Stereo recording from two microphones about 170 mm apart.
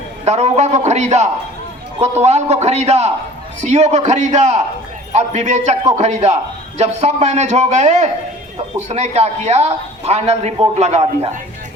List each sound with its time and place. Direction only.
0.3 s a man's voice: 40° right (ahead or behind)